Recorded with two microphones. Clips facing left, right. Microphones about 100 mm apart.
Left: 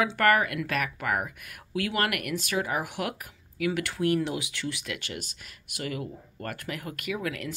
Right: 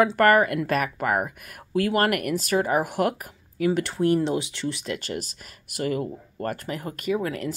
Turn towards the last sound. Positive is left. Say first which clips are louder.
# right 6 dB
turn(degrees=-35)  # may be behind; listen again after turning